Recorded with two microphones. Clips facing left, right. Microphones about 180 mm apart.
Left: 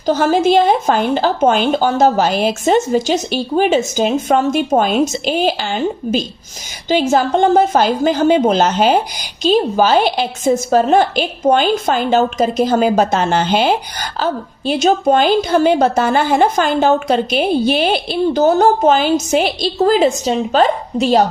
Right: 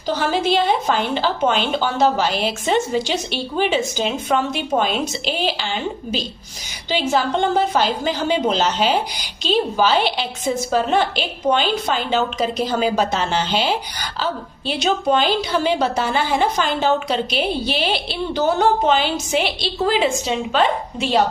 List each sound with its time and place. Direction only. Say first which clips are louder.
0.0 s a woman's voice: left 7 dB; 45° left (ahead or behind)